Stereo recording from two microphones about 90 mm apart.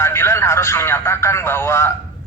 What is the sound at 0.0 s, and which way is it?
Speech, 30° left (ahead or behind).